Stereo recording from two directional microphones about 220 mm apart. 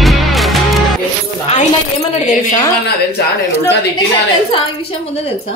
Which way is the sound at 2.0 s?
20° left (ahead or behind).